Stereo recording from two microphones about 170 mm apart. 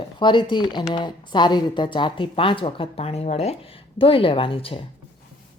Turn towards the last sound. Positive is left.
turn(degrees=30)  # may be behind; listen again after turning